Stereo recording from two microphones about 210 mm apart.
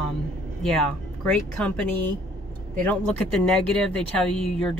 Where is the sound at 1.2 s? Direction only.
5° left (ahead or behind).